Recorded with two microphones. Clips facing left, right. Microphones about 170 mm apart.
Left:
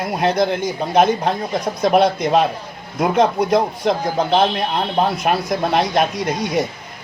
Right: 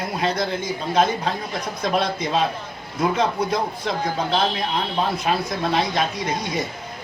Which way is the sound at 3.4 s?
55° left (ahead or behind).